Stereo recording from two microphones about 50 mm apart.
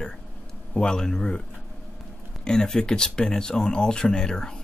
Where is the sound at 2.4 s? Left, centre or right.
Centre.